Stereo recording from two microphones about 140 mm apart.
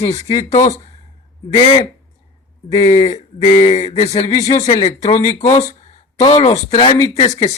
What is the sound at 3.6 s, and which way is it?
Speech, 50° left (ahead or behind).